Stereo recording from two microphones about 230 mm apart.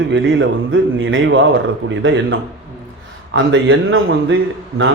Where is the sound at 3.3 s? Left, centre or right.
Right.